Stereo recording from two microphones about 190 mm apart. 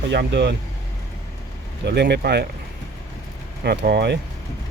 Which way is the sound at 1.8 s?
65° right (ahead or behind).